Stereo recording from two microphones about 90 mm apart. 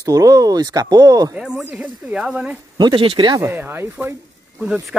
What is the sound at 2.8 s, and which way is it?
Speech, 65° right (ahead or behind).